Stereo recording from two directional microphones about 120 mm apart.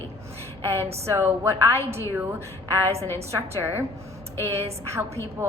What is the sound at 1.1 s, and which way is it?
Speech, 20° right (ahead or behind).